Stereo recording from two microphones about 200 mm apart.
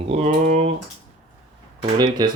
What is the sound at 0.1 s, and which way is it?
Typing, 35° right (ahead or behind).